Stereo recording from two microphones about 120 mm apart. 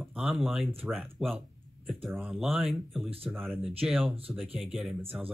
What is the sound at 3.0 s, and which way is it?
Speech, 55° right (ahead or behind).